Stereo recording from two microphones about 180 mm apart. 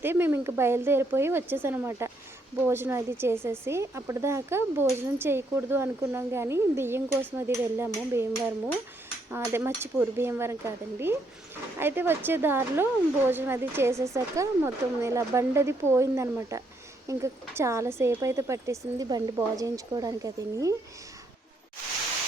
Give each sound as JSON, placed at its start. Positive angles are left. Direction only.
{"t": 0.0, "sound": "speech", "side_deg": -10}